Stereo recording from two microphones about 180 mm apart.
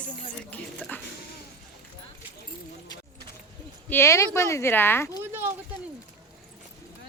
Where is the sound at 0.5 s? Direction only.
10° left (ahead or behind).